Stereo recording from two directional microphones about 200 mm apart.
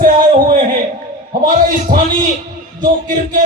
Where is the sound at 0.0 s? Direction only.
45° right (ahead or behind).